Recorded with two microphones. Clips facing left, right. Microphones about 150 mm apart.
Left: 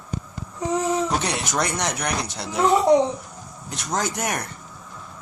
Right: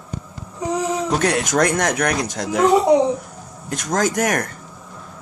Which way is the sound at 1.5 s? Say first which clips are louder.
Right 6 dB; 50° right (ahead or behind).